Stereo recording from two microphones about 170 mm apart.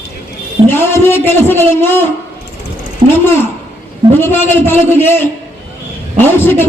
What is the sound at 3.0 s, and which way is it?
Speech, 35° right (ahead or behind).